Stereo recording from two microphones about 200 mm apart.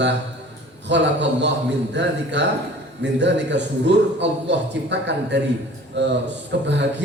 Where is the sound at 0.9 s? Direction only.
60° right (ahead or behind).